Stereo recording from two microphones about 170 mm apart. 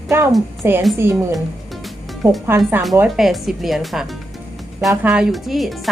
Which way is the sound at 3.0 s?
Centre (ahead or behind).